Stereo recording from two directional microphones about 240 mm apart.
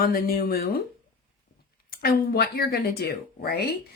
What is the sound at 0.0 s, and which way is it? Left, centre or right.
Speech, left.